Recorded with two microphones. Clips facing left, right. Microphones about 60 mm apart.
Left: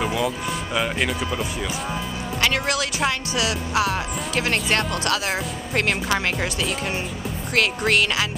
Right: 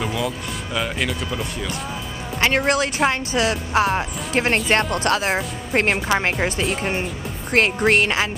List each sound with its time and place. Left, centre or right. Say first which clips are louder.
0.0 s a sound: left 1 dB; centre
0.7 s speech: even; centre
2.4 s speech: right 4 dB; right
7.5 s speech: right 3 dB; right